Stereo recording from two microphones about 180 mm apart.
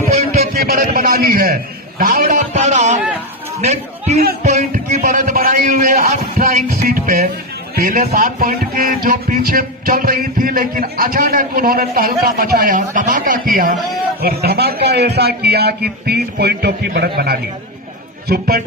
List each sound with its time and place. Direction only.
0.3 s a sound: 55° right (ahead or behind)
2.0 s a man's voice: 50° right (ahead or behind)
4.4 s music: 40° right (ahead or behind)
14.2 s a man's voice: 60° right (ahead or behind)